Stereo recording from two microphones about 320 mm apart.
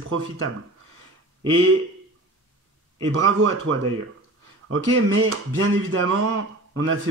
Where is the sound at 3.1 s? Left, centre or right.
Right.